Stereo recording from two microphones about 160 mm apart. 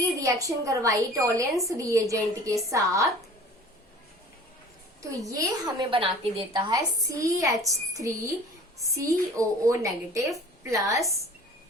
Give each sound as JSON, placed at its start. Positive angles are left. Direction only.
{"t": 0.0, "sound": "a woman's voice", "side_deg": -20}
{"t": 5.3, "sound": "a woman's voice", "side_deg": -25}